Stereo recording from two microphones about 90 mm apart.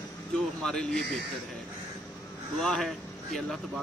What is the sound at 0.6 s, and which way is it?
Speech, 10° left (ahead or behind).